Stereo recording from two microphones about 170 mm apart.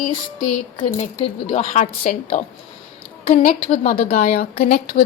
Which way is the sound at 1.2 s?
40° left (ahead or behind).